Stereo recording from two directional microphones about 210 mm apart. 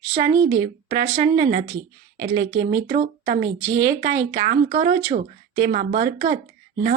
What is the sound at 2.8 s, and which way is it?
Speech, 35° right (ahead or behind).